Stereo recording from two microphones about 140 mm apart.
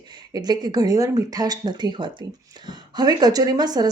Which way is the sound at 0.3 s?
30° right (ahead or behind).